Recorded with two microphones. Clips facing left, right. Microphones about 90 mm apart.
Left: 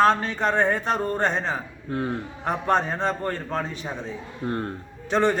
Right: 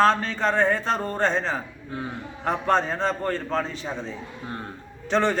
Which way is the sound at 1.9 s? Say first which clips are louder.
Left 7 dB; 55° left (ahead or behind).